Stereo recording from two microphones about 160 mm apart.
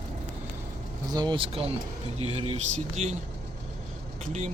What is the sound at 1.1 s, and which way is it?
Speech, 25° right (ahead or behind).